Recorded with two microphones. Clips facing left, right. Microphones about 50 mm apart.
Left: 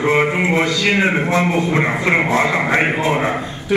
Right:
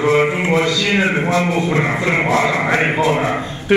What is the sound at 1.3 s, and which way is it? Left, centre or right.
A man's voice, left.